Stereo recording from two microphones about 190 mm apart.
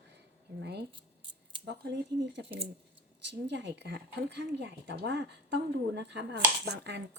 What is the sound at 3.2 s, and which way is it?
A woman's voice, 65° right (ahead or behind).